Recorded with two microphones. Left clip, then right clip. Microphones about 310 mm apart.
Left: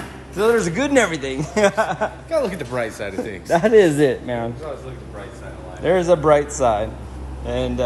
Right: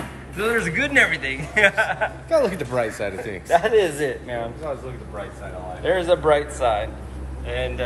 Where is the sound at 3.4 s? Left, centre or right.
Left.